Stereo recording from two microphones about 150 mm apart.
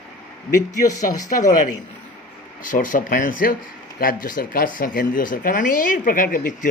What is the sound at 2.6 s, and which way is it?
Speech, 60° left (ahead or behind).